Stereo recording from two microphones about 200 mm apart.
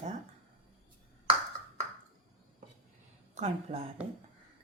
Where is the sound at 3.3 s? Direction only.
35° right (ahead or behind).